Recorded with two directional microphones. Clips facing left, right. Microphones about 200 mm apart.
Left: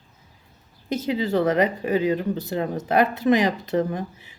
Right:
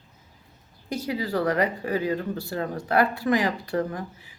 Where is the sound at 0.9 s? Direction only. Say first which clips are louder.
Left 4 dB; 20° left (ahead or behind).